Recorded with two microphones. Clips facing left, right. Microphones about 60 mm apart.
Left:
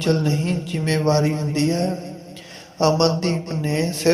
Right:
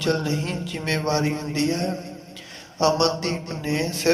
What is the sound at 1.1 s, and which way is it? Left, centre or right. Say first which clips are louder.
Speech: left 4 dB; right.